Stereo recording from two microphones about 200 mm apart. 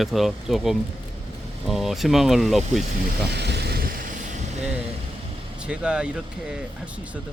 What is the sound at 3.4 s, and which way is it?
Vehicle, 55° right (ahead or behind).